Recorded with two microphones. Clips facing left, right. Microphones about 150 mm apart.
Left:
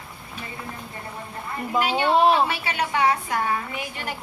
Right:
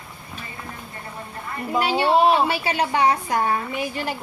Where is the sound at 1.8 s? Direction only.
30° right (ahead or behind).